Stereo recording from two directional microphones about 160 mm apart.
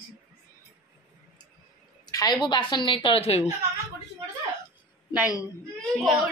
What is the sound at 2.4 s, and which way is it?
A woman's voice, 30° left (ahead or behind).